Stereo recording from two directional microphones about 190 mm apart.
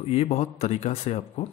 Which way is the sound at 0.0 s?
35° left (ahead or behind).